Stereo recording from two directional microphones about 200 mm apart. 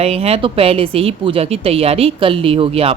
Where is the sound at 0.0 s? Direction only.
30° right (ahead or behind).